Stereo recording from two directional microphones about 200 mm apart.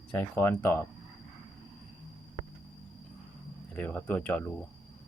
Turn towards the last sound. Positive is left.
turn(degrees=10)  # may be behind; listen again after turning